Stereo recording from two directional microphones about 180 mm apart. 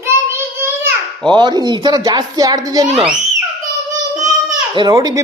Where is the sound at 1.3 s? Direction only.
25° right (ahead or behind).